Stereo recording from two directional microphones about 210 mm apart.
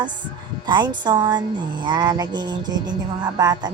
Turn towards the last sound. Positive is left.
turn(degrees=-20)  # may be behind; listen again after turning